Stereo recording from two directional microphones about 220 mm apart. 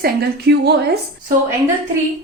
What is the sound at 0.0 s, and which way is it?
Speech, 45° right (ahead or behind).